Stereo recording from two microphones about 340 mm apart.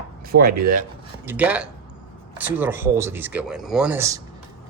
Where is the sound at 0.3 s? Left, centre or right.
Right.